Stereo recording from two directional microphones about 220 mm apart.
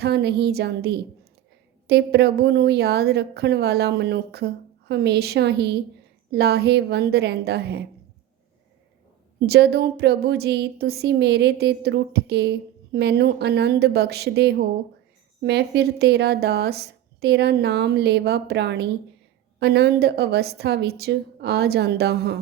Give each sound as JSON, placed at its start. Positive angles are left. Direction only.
{"t": 0.0, "sound": "a woman's voice", "side_deg": -50}
{"t": 9.5, "sound": "a woman's voice", "side_deg": -45}